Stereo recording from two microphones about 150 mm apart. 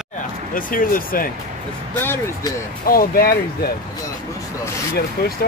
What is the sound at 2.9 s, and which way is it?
Speech, 80° left.